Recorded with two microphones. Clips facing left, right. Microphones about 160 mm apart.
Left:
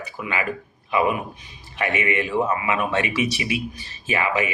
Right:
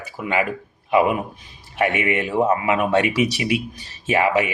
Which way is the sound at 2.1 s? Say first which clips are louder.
Right 1 dB; 50° right (ahead or behind).